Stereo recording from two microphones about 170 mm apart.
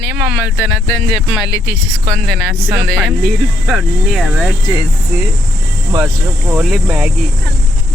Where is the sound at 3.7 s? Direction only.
Centre (ahead or behind).